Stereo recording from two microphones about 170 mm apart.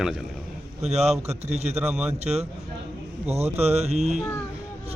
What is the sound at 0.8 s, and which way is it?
Speech, 40° right (ahead or behind).